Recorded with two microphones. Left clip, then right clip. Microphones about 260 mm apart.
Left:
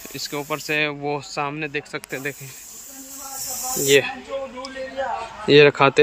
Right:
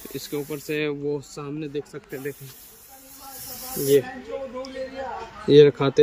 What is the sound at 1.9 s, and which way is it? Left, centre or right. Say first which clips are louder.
Speech: left 5 dB; left.